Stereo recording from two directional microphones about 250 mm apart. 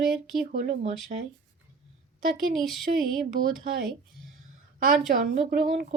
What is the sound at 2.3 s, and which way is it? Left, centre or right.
Speech, centre.